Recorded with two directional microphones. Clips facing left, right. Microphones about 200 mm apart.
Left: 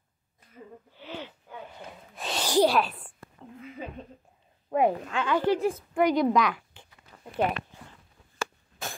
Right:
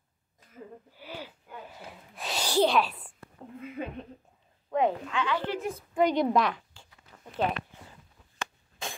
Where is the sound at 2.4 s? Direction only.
10° left (ahead or behind).